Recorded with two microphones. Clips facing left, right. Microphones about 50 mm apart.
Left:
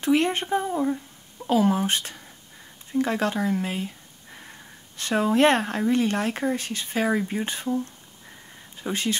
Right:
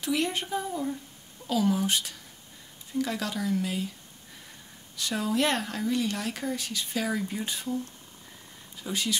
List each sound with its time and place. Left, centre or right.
0.0 s speech: left